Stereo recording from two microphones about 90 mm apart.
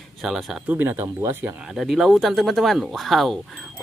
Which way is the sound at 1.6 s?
5° right (ahead or behind).